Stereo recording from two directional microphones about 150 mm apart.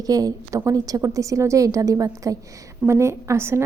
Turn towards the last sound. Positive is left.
turn(degrees=-15)  # may be behind; listen again after turning